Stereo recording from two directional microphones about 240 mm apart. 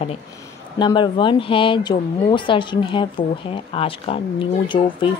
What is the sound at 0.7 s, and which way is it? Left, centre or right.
Speech, centre.